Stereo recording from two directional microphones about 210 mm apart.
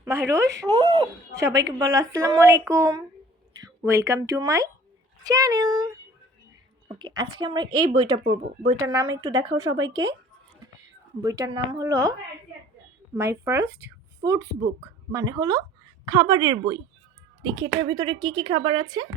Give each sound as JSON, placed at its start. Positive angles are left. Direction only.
{"t": 0.7, "sound": "a woman's voice", "side_deg": -20}
{"t": 11.2, "sound": "a woman's voice", "side_deg": -15}
{"t": 13.1, "sound": "a woman's voice", "side_deg": -10}